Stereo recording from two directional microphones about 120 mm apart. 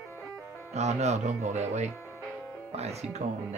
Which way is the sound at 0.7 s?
65° right (ahead or behind).